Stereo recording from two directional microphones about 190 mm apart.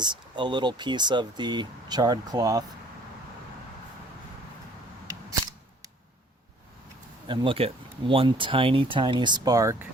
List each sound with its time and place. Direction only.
0.0 s speech: 25° right (ahead or behind)
7.3 s speech: 25° right (ahead or behind)